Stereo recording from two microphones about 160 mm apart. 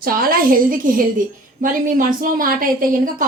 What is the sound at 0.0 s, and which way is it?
A woman's voice, 65° right (ahead or behind).